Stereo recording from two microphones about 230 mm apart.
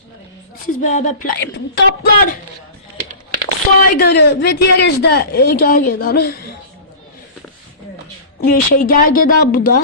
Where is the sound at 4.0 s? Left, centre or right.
Left.